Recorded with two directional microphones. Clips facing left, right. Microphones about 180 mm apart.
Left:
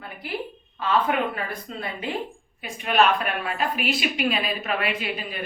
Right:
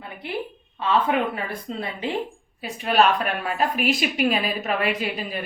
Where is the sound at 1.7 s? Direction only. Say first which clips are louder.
Right 5 dB; 25° right (ahead or behind).